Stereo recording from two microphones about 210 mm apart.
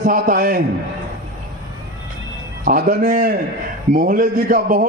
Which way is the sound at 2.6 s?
40° right (ahead or behind).